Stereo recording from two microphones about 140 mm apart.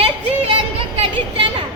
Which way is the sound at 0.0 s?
40° right (ahead or behind).